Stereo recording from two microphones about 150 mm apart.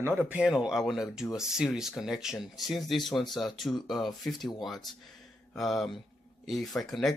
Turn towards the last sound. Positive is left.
turn(degrees=0)  # may be behind; listen again after turning